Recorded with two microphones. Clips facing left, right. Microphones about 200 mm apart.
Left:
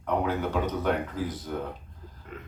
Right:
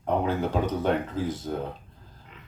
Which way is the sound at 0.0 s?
30° right (ahead or behind).